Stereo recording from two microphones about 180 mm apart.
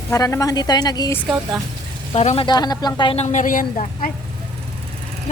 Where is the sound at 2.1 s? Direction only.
35° left (ahead or behind).